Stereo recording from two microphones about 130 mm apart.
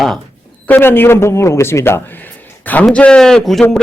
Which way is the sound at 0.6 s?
15° left (ahead or behind).